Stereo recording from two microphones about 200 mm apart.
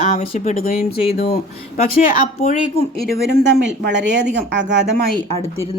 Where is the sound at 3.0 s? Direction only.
50° right (ahead or behind).